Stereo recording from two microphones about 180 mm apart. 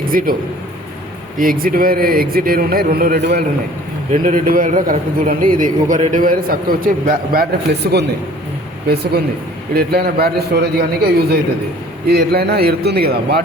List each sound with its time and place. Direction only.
0.1 s a man's voice: 50° right (ahead or behind)
1.4 s a man's voice: 55° right (ahead or behind)
4.1 s a man's voice: 50° right (ahead or behind)